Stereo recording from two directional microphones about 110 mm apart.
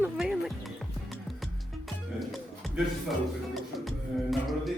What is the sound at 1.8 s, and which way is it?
Music, centre (ahead or behind).